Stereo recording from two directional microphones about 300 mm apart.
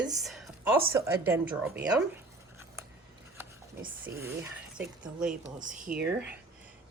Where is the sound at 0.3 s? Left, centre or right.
Centre.